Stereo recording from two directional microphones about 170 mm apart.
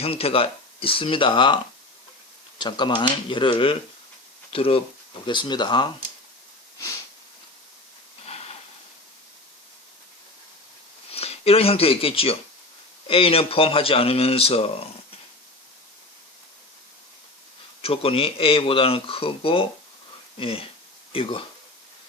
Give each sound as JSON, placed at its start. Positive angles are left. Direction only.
{"t": 0.0, "sound": "speech", "side_deg": 35}
{"t": 2.6, "sound": "speech", "side_deg": 25}
{"t": 8.3, "sound": "a sound", "side_deg": 35}
{"t": 11.1, "sound": "speech", "side_deg": 35}
{"t": 17.8, "sound": "speech", "side_deg": 35}